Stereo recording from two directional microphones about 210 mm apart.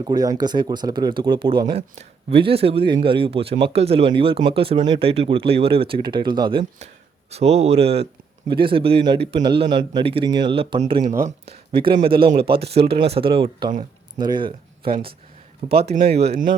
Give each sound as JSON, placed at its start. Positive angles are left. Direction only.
{"t": 0.0, "sound": "speech", "side_deg": -20}
{"t": 14.8, "sound": "speech", "side_deg": -45}
{"t": 16.1, "sound": "speech", "side_deg": -30}